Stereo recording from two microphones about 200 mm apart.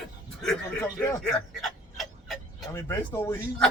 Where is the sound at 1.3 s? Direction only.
Centre (ahead or behind).